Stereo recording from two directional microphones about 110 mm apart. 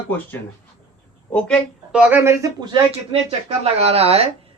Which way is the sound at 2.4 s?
40° right (ahead or behind).